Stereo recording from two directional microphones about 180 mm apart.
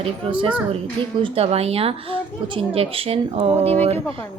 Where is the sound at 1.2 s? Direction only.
35° right (ahead or behind).